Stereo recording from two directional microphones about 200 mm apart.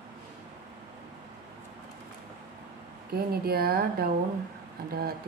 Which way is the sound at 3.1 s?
50° right (ahead or behind).